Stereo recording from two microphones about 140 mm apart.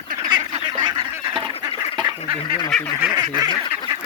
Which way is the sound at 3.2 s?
30° right (ahead or behind).